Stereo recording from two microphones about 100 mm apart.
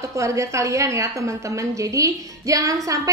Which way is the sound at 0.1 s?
30° right (ahead or behind).